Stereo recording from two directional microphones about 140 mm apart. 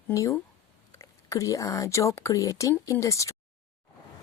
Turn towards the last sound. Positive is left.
turn(degrees=20)  # may be behind; listen again after turning